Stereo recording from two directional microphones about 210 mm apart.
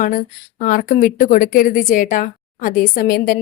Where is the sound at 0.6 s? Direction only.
40° left (ahead or behind).